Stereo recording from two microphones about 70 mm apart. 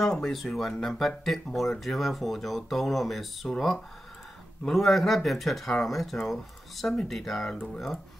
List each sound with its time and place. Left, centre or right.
0.0 s speech: centre